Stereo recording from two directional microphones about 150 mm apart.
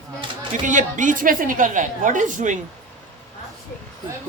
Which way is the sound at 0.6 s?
60° right (ahead or behind).